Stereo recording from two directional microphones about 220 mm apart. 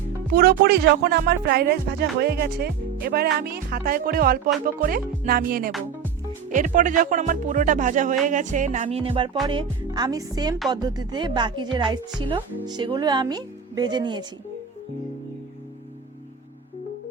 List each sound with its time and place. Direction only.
0.3 s speech: 45° right (ahead or behind); by 9.4 s 25° right (ahead or behind)
9.5 s music: 20° right (ahead or behind)
10.7 s speech: 20° right (ahead or behind)